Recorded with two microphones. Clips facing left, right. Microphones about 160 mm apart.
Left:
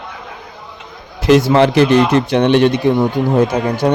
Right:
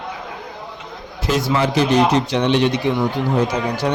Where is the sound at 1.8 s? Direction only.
60° left (ahead or behind).